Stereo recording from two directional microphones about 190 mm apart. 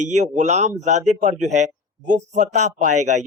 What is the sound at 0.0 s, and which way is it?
Speech, 40° right (ahead or behind).